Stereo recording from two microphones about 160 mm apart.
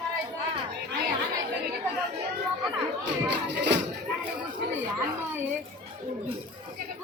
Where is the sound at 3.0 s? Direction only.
90° right.